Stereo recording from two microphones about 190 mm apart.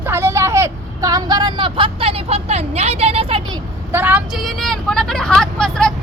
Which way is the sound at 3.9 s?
10° right (ahead or behind).